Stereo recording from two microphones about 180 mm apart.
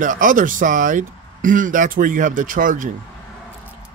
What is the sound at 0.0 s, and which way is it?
Speech, 45° right (ahead or behind).